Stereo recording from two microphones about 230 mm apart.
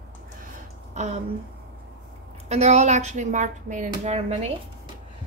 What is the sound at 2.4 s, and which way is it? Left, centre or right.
A woman's voice, right.